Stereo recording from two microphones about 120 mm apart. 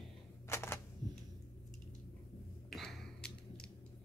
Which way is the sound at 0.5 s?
20° left (ahead or behind).